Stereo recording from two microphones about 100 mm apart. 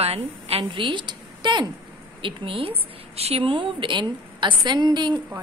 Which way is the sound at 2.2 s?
65° right (ahead or behind).